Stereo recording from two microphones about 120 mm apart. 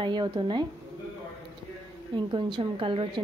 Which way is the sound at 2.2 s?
40° right (ahead or behind).